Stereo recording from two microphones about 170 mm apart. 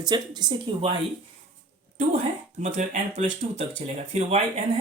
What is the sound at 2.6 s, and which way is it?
Speech, 45° right (ahead or behind).